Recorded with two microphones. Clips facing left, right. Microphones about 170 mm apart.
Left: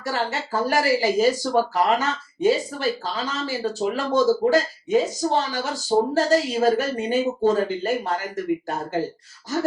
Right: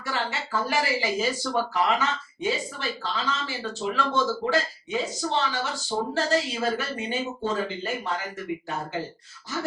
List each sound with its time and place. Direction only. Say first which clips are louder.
0.0 s speech: left 4 dB; 40° left (ahead or behind)